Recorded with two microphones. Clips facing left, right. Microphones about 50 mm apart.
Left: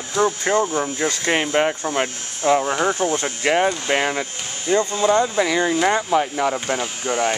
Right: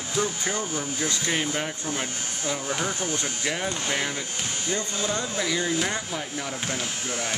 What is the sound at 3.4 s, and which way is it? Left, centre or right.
Speech, left.